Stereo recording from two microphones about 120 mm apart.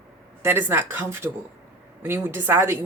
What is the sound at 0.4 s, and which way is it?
Speech, 20° right (ahead or behind).